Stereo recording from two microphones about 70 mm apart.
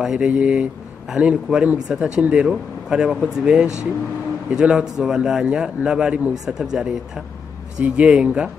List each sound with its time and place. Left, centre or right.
0.0 s a man's voice: centre